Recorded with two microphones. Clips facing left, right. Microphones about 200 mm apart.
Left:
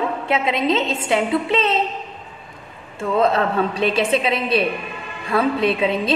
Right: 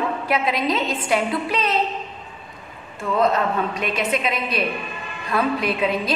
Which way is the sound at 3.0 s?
30° left (ahead or behind).